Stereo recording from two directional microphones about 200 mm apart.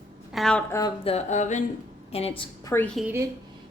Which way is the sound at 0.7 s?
15° left (ahead or behind).